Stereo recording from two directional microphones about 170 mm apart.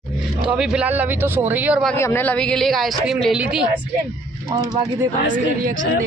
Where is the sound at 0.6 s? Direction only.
10° right (ahead or behind).